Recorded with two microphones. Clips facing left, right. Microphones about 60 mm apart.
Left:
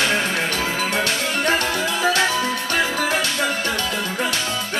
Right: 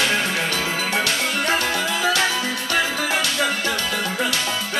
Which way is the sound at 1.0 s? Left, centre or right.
Left.